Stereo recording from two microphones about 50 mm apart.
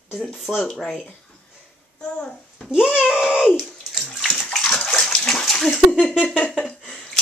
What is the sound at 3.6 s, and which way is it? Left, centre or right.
Bathtub, centre.